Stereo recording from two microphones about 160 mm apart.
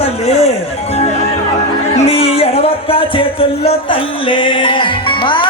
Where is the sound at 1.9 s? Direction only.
40° left (ahead or behind).